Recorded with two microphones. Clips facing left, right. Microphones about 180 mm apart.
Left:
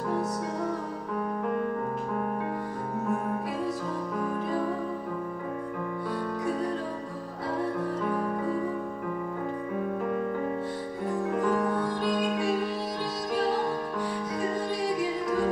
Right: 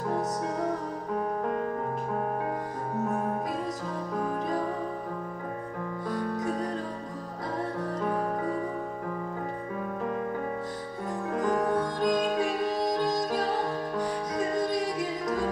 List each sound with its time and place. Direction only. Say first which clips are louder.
3.1 s music: left 2 dB; 40° right (ahead or behind)
6.0 s music: right 1 dB; 40° right (ahead or behind)
8.0 s music: right 3 dB; 35° right (ahead or behind)
11.3 s music: right 2 dB; 40° right (ahead or behind)